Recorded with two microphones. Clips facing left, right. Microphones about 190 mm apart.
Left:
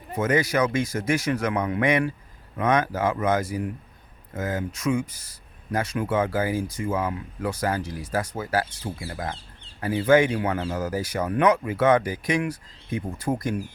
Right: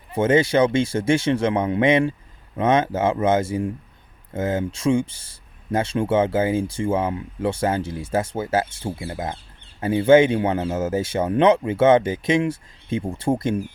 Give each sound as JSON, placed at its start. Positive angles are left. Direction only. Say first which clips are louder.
{"t": 0.1, "sound": "speech", "louder": "right 5 dB", "side_deg": -25}